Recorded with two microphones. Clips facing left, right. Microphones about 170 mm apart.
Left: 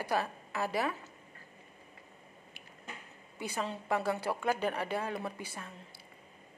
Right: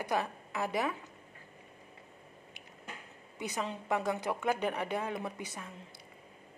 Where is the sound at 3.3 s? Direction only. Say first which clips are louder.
Even; 20° right (ahead or behind).